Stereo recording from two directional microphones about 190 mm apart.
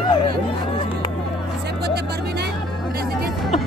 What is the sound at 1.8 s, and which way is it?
Music, 60° right (ahead or behind).